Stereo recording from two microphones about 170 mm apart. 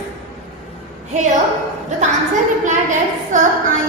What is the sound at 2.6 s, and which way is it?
Speech, 45° right (ahead or behind).